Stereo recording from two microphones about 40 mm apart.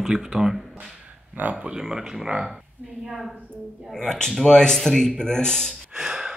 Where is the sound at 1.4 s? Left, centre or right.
Right.